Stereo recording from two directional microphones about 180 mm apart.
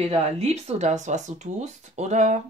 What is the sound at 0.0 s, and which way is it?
Speech, 35° right (ahead or behind).